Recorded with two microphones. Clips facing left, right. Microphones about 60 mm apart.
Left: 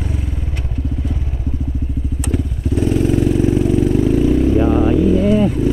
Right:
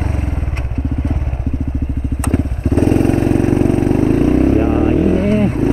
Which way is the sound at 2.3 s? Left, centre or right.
Right.